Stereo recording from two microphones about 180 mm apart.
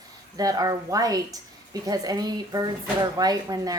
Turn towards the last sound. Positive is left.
turn(degrees=-20)  # may be behind; listen again after turning